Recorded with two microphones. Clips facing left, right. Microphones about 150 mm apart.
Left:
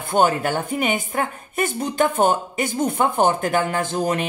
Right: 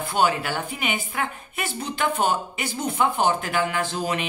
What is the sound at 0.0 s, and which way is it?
Speech, 50° left (ahead or behind).